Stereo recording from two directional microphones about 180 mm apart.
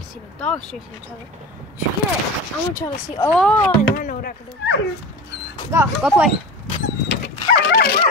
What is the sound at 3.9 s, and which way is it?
Speech, 45° left (ahead or behind).